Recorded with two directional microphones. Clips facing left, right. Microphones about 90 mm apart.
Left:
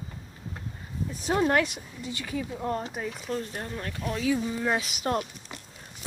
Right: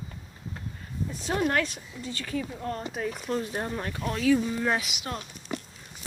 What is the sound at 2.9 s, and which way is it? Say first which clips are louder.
Speech: right 2 dB; centre (ahead or behind).